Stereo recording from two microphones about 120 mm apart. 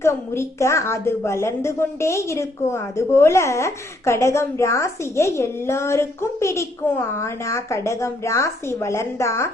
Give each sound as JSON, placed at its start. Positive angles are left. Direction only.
{"t": 0.0, "sound": "a woman's voice", "side_deg": 20}